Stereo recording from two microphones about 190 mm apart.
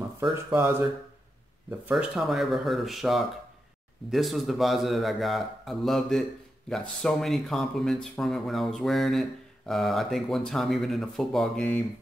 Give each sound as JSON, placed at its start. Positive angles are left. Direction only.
{"t": 0.2, "sound": "speech", "side_deg": -15}